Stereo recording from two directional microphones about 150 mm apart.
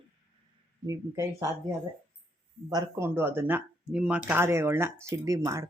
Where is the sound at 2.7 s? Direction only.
20° right (ahead or behind).